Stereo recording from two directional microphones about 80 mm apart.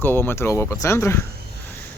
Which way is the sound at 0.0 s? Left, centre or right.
Left.